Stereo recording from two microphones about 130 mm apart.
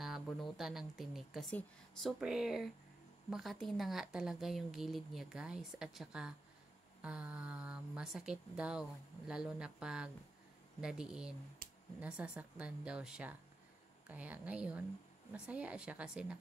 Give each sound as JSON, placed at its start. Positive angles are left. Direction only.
{"t": 0.0, "sound": "a woman's voice", "side_deg": 0}
{"t": 11.6, "sound": "a sound", "side_deg": -90}
{"t": 12.0, "sound": "speech", "side_deg": -10}